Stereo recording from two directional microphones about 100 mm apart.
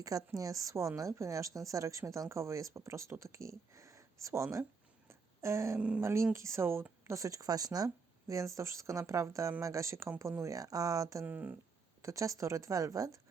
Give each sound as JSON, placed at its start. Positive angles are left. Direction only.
{"t": 0.0, "sound": "a woman's voice", "side_deg": -35}
{"t": 5.0, "sound": "a sound", "side_deg": -30}
{"t": 6.0, "sound": "a woman's voice", "side_deg": -25}
{"t": 11.3, "sound": "speech", "side_deg": -15}
{"t": 12.0, "sound": "a woman's voice", "side_deg": -35}